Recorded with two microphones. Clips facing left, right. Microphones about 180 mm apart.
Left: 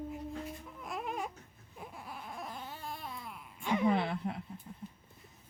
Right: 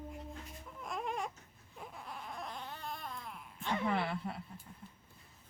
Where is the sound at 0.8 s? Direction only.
Centre (ahead or behind); by 4.3 s 20° left (ahead or behind).